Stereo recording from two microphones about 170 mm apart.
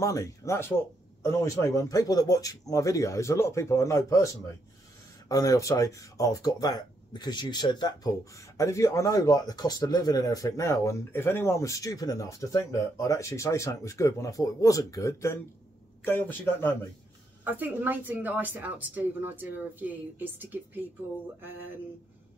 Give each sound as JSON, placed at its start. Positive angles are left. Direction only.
{"t": 0.0, "sound": "speech", "side_deg": 20}
{"t": 5.3, "sound": "speech", "side_deg": 20}
{"t": 17.5, "sound": "a woman's voice", "side_deg": -10}